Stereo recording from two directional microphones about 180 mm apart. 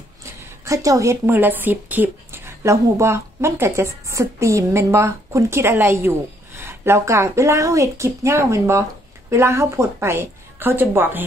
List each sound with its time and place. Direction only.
0.2 s a woman's voice: 15° right (ahead or behind)